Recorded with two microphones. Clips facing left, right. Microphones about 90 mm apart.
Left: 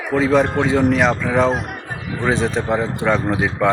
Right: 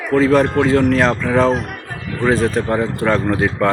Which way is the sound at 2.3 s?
20° left (ahead or behind).